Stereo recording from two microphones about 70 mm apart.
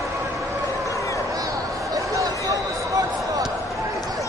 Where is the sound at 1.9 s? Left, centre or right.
Right.